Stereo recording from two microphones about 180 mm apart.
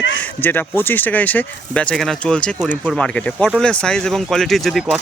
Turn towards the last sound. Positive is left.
turn(degrees=0)  # may be behind; listen again after turning